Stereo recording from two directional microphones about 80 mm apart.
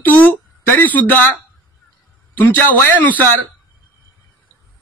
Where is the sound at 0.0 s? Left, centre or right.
Left.